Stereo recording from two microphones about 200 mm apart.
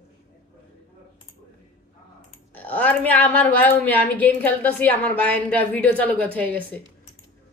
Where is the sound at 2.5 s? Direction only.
10° left (ahead or behind).